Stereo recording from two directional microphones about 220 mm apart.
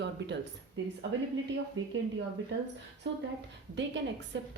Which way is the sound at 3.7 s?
55° right (ahead or behind).